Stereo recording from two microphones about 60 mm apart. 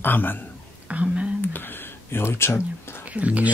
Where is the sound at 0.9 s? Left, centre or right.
Right.